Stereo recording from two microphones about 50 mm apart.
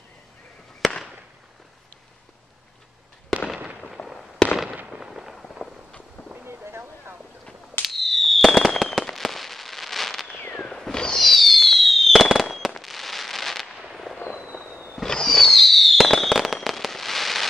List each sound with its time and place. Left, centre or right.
0.8 s fireworks: centre
3.8 s fireworks: centre
4.8 s fireworks: centre
5.5 s firecracker: centre
5.9 s run: left
6.3 s a sound: right
7.8 s fireworks: centre
10.5 s a sound: centre
11.1 s fireworks: centre
14.4 s fireworks: centre
15.0 s fireworks: centre